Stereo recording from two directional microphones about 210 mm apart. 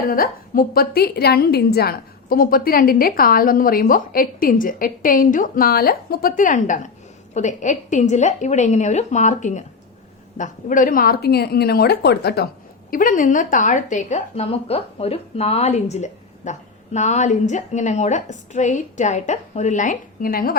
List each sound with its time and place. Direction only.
0.1 s a woman's voice: 45° left (ahead or behind)